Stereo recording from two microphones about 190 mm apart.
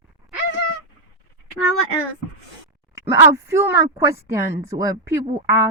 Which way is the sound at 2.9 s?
15° right (ahead or behind).